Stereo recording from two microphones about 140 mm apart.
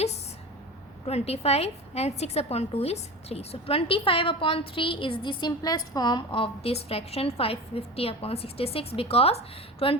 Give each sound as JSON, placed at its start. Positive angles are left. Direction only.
{"t": 1.0, "sound": "a woman's voice", "side_deg": 45}